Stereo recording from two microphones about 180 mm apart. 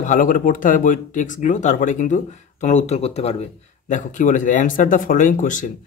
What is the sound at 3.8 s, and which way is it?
Speech, 45° left (ahead or behind).